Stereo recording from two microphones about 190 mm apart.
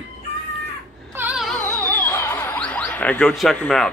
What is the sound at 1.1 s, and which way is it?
Music, 5° right (ahead or behind).